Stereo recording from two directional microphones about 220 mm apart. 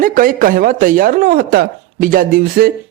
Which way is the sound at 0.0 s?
40° right (ahead or behind).